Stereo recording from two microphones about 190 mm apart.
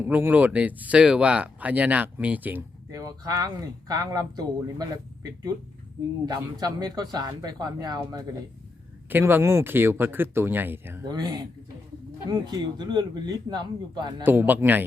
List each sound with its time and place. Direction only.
0.0 s speech: 10° right (ahead or behind)
14.3 s speech: 10° right (ahead or behind)